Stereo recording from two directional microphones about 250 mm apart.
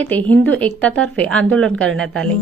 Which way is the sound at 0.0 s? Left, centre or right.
Centre.